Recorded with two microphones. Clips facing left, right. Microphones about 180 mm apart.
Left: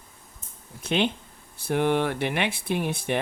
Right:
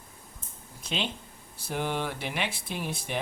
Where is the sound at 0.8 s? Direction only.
60° left (ahead or behind).